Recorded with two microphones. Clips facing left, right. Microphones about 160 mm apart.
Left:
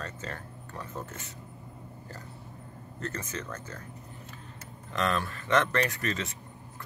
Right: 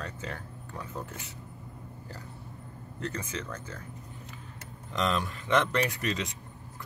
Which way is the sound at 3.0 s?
10° right (ahead or behind).